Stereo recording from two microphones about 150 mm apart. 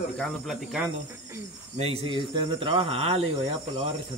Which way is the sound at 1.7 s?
40° right (ahead or behind).